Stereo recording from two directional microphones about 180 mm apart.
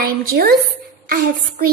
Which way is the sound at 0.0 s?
55° right (ahead or behind).